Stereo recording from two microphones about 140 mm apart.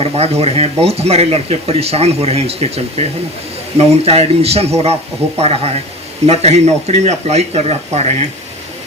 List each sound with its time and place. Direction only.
0.0 s speech: 45° right (ahead or behind)